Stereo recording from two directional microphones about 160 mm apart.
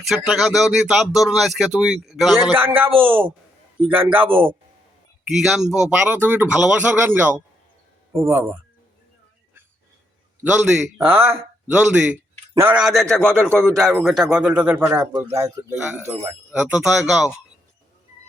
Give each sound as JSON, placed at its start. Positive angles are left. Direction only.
{"t": 0.3, "sound": "speech", "side_deg": 0}
{"t": 2.5, "sound": "speech", "side_deg": -10}
{"t": 10.4, "sound": "a man's voice", "side_deg": -5}
{"t": 12.8, "sound": "speech", "side_deg": 0}
{"t": 16.6, "sound": "speech", "side_deg": -5}